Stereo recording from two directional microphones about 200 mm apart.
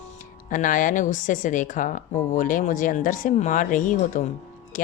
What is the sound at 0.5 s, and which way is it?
Speech, 40° left (ahead or behind).